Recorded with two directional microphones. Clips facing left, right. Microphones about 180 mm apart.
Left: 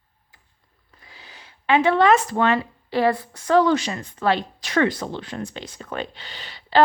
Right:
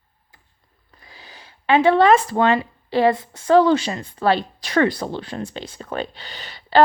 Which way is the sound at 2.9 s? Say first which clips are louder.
Right 3 dB; 25° right (ahead or behind).